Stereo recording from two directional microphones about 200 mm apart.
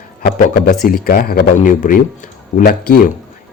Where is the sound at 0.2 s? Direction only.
50° left (ahead or behind).